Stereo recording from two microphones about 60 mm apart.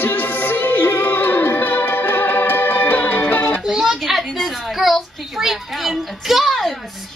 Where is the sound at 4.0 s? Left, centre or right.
Centre.